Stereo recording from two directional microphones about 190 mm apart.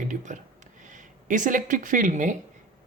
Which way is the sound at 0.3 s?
40° right (ahead or behind).